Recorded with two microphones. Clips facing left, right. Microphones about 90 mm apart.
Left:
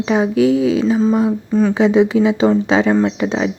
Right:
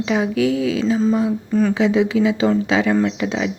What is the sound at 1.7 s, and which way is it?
Speech, 30° left (ahead or behind).